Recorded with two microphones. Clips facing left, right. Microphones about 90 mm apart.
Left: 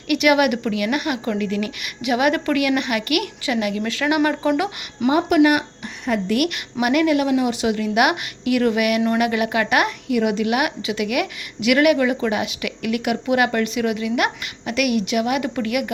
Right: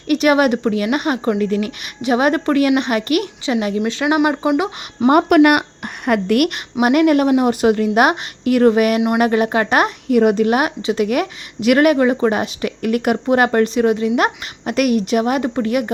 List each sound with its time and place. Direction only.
0.1 s a woman's voice: 35° right (ahead or behind)
5.0 s a woman's voice: 60° right (ahead or behind); by 15.9 s 30° right (ahead or behind)